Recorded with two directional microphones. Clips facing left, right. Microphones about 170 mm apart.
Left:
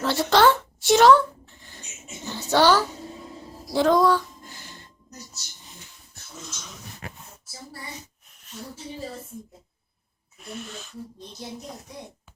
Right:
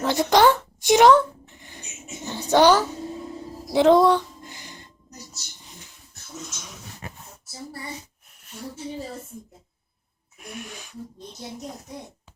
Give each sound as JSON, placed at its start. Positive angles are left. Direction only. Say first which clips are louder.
{"t": 0.0, "sound": "a sound", "louder": "right 1 dB", "side_deg": -15}
{"t": 2.2, "sound": "speech", "louder": "right 3 dB", "side_deg": -15}
{"t": 3.7, "sound": "music", "louder": "right 3 dB", "side_deg": -20}
{"t": 10.3, "sound": "speech", "louder": "left 1 dB", "side_deg": -10}